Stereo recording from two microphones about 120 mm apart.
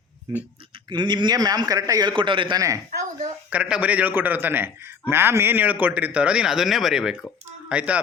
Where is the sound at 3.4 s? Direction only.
10° right (ahead or behind).